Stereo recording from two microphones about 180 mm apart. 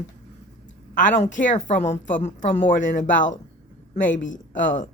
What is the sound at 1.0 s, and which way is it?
A woman's voice, 40° left (ahead or behind).